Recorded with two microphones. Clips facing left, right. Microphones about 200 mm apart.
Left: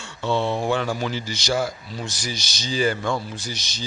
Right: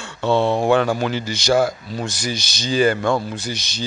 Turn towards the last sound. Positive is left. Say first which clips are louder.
# right 5 dB
turn(degrees=-60)  # may be behind; listen again after turning